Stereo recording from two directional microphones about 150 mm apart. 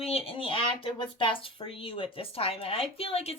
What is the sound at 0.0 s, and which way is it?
Speech, 40° left (ahead or behind).